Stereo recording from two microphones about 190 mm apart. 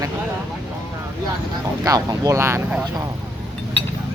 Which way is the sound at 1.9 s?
20° right (ahead or behind).